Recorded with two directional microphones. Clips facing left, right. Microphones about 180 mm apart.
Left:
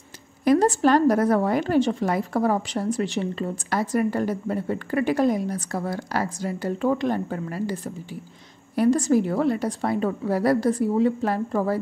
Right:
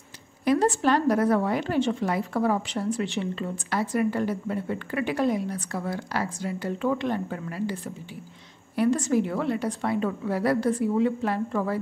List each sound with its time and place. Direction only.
0.5 s a woman's voice: 45° left (ahead or behind)